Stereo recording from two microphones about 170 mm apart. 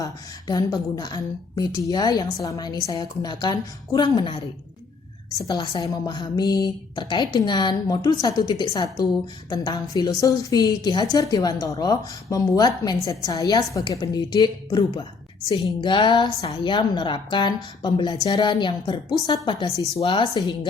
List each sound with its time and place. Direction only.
0.0 s a woman's voice: 20° left (ahead or behind)
5.5 s a woman's voice: 20° left (ahead or behind)